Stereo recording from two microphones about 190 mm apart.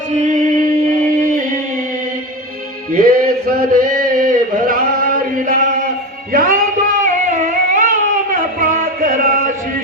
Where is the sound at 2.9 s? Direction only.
50° right (ahead or behind).